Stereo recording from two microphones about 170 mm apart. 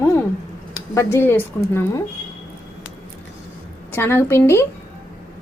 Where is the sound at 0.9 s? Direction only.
15° left (ahead or behind).